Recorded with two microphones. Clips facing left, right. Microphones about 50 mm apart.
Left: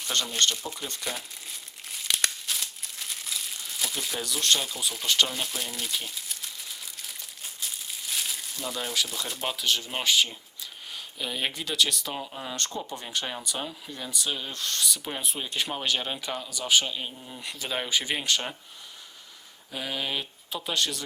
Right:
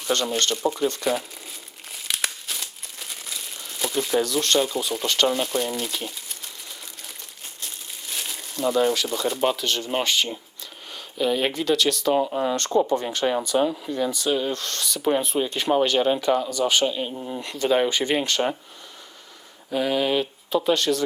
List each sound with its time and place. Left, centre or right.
0.0 s crumpling: centre
10.9 s speech: centre
12.2 s speech: right
13.0 s speech: centre
16.5 s speech: centre
19.7 s speech: centre